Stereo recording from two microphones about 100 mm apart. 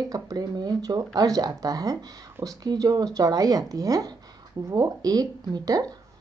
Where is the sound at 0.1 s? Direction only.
40° right (ahead or behind).